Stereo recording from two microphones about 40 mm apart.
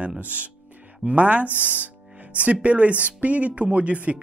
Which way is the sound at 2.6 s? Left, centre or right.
Right.